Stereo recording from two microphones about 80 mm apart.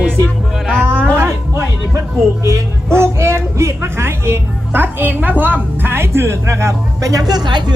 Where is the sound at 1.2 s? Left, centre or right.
Right.